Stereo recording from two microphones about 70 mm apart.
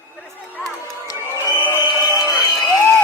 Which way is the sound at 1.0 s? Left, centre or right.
Left.